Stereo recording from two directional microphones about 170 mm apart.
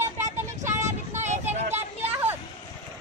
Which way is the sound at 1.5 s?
40° right (ahead or behind).